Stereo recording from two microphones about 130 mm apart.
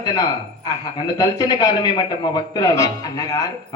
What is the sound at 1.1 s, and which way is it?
Speech, 35° left (ahead or behind).